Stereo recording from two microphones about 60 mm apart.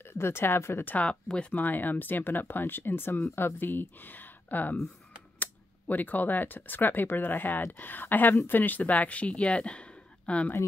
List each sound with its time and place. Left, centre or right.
0.0 s speech: left
0.8 s speech: left